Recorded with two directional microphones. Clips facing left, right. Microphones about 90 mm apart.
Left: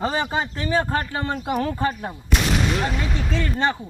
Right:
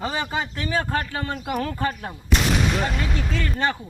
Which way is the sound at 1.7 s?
15° left (ahead or behind).